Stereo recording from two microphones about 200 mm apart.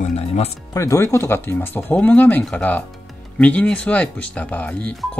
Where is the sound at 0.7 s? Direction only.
15° left (ahead or behind).